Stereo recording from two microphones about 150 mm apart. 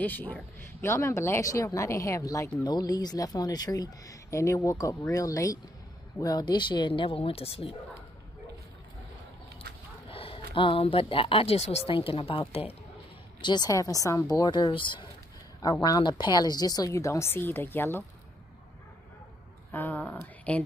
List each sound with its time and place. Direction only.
0.0 s speech: 10° left (ahead or behind); by 7.7 s 40° left (ahead or behind)
10.0 s speech: 40° left (ahead or behind)
13.4 s speech: 30° left (ahead or behind)
19.7 s speech: 10° left (ahead or behind)